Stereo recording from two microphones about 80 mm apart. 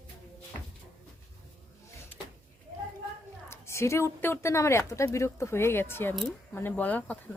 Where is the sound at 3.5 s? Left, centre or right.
Left.